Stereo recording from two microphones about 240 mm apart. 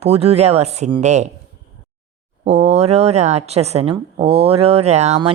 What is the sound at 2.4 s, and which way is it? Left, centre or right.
A woman's voice, right.